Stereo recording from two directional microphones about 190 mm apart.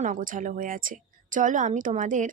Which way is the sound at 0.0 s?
45° right (ahead or behind).